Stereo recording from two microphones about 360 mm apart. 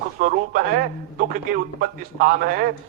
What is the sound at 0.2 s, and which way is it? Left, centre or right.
A man's voice, right.